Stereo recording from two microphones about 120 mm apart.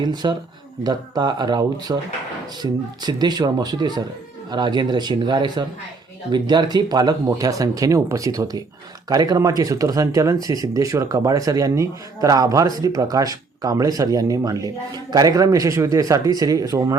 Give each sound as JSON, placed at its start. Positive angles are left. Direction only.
{"t": 0.0, "sound": "speech", "side_deg": -35}